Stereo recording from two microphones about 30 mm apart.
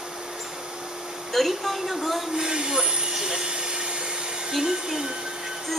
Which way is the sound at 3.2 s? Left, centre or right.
Right.